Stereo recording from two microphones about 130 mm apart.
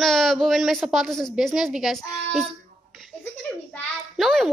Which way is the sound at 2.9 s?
Centre (ahead or behind).